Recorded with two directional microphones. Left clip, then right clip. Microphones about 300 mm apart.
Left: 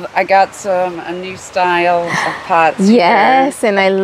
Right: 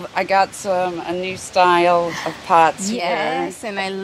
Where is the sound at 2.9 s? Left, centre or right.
Left.